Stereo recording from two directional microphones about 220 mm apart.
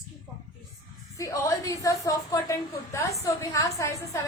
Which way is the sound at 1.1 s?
15° left (ahead or behind).